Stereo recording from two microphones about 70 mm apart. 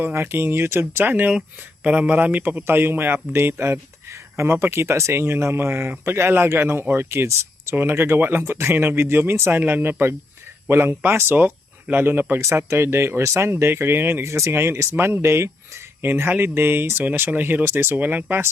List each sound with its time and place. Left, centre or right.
0.0 s speech: right
12.4 s speech: right